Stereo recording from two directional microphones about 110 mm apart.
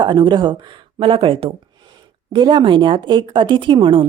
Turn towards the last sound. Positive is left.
turn(degrees=-50)  # may be behind; listen again after turning